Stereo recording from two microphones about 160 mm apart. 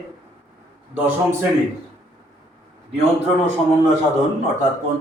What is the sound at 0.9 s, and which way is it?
Speech, 10° right (ahead or behind).